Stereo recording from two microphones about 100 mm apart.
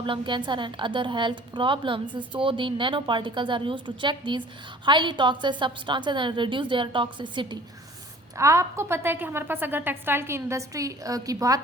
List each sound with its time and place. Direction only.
0.0 s a woman's voice: 55° right (ahead or behind)
8.4 s a woman's voice: 30° right (ahead or behind)